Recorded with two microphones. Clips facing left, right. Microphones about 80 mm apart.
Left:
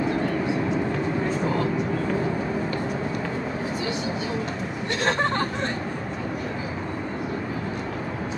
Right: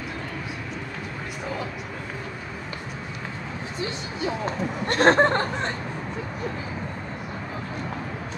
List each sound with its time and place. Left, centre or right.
5.1 s speech: right